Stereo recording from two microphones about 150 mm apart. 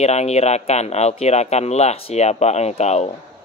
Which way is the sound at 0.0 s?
45° left (ahead or behind).